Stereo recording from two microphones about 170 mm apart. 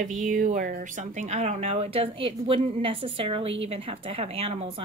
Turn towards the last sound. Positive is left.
turn(degrees=-35)  # may be behind; listen again after turning